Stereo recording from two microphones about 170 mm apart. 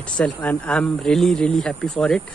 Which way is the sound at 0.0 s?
10° left (ahead or behind).